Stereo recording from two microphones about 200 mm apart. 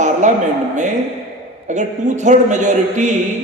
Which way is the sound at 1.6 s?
35° right (ahead or behind).